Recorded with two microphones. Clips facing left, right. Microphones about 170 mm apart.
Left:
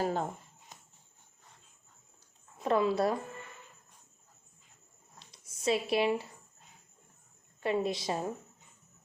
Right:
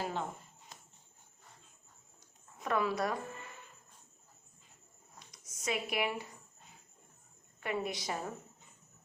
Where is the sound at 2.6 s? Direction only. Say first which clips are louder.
Left 5 dB; 25° left (ahead or behind).